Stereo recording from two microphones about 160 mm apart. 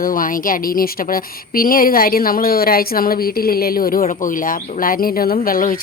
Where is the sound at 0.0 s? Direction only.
60° left (ahead or behind).